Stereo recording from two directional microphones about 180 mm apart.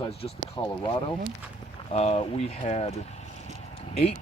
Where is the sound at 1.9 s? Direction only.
35° left (ahead or behind).